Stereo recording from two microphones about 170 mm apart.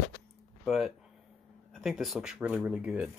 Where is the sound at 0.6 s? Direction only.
Centre (ahead or behind).